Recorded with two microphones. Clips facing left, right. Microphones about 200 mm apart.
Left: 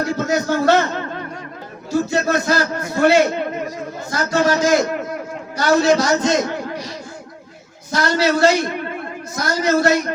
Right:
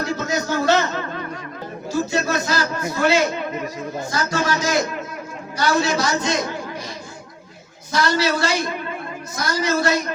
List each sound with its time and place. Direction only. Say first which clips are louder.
0.0 s a man's voice: left 4 dB; 60° left (ahead or behind)
2.0 s a man's voice: left 4 dB; 55° left (ahead or behind)
7.9 s a man's voice: left 3 dB; 50° left (ahead or behind)
9.4 s a man's voice: left 4 dB; 50° left (ahead or behind)